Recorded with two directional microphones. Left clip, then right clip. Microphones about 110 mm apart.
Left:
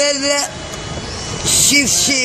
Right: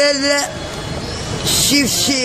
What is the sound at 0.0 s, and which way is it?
Speech, 5° right (ahead or behind).